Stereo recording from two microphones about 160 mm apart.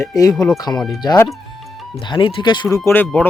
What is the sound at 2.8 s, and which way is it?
Speech, 10° left (ahead or behind).